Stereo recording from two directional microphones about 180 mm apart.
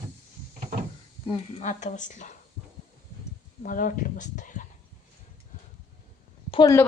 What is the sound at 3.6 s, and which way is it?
Speech, 50° left (ahead or behind).